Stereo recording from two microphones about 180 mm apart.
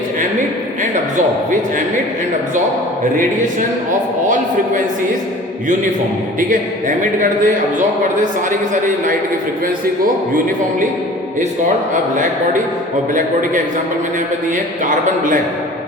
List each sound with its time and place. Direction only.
6.5 s speech: 45° right (ahead or behind)